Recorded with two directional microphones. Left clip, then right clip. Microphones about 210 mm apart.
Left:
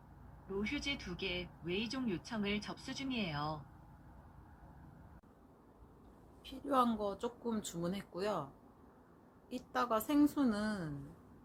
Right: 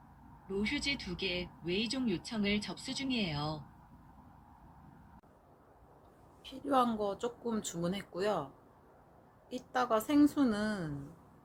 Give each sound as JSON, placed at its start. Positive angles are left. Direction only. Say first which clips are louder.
{"t": 0.6, "sound": "speech", "louder": "right 5 dB", "side_deg": -25}
{"t": 6.4, "sound": "speech", "louder": "right 3 dB", "side_deg": 0}
{"t": 9.5, "sound": "speech", "louder": "right 4 dB", "side_deg": 0}